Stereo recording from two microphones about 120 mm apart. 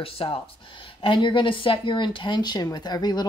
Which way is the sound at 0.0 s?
50° left (ahead or behind).